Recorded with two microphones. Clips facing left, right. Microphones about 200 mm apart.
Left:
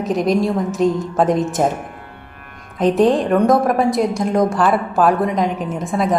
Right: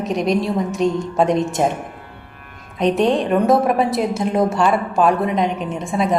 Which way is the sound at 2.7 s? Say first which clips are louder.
Left 2 dB; centre (ahead or behind).